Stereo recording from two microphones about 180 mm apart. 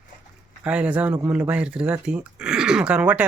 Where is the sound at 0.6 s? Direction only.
5° right (ahead or behind).